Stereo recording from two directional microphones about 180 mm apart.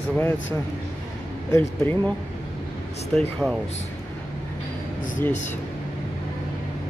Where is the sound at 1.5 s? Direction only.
15° left (ahead or behind).